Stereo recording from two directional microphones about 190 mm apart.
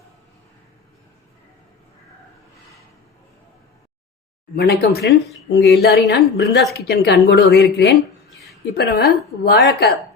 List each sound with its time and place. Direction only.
4.5 s speech: 55° left (ahead or behind)
8.7 s speech: 55° left (ahead or behind)